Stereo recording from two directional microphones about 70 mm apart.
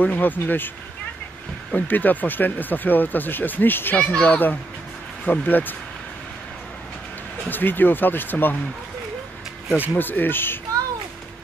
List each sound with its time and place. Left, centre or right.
0.0 s speech: left
1.7 s speech: left
4.0 s speech: centre
7.4 s speech: left
9.9 s speech: left